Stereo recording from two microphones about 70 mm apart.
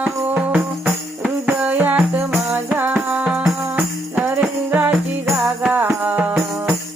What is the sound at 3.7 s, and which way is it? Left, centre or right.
Music, right.